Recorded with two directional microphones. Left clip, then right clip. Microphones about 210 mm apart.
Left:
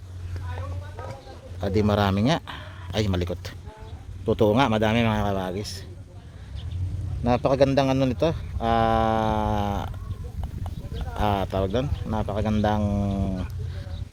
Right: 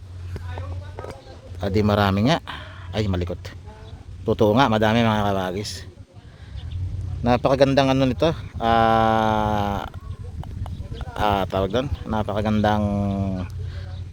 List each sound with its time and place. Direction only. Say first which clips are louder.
1.6 s speech: right 3 dB; 10° right (ahead or behind)
7.3 s speech: right 3 dB; 20° right (ahead or behind)
10.9 s speech: right 4 dB; 20° right (ahead or behind)